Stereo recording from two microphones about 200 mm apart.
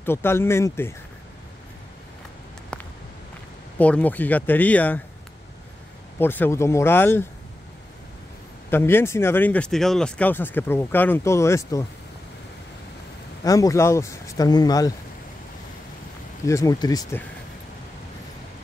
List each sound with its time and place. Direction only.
0.0 s speech: 10° left (ahead or behind)
2.7 s a sound: 5° left (ahead or behind)
3.7 s speech: 5° left (ahead or behind)
6.1 s speech: 10° left (ahead or behind)
8.6 s speech: 10° left (ahead or behind)
13.4 s speech: 15° left (ahead or behind)
16.4 s speech: 15° left (ahead or behind)